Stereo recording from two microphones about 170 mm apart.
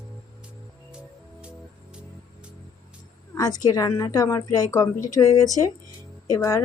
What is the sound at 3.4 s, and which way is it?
A woman's voice, 20° left (ahead or behind).